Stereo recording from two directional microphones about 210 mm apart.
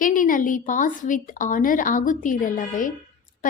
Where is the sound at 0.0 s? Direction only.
40° left (ahead or behind).